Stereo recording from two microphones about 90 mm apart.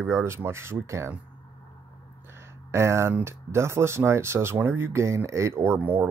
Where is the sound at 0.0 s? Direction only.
30° right (ahead or behind).